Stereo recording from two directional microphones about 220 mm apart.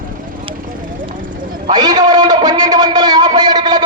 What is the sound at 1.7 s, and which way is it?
A man's voice, 20° right (ahead or behind).